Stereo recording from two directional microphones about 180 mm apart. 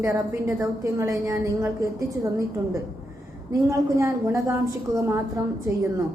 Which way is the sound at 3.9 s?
15° right (ahead or behind).